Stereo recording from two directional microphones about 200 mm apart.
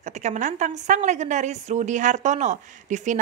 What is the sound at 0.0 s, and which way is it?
A woman's voice, 35° right (ahead or behind).